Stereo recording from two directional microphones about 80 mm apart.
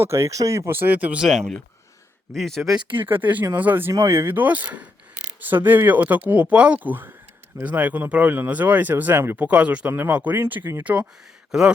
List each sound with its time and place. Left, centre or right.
0.0 s speech: right; by 1.3 s centre
1.3 s speech: centre
2.9 s speech: right
3.9 s speech: right
4.4 s speech: centre